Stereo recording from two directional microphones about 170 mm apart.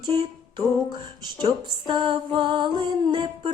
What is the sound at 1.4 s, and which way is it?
Music, 25° right (ahead or behind).